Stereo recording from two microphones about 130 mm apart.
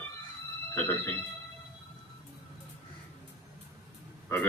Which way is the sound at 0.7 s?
15° left (ahead or behind).